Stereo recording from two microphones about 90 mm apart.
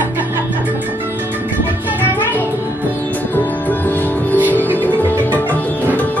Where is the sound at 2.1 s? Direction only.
20° left (ahead or behind).